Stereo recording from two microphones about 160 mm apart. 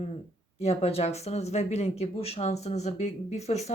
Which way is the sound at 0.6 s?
40° left (ahead or behind).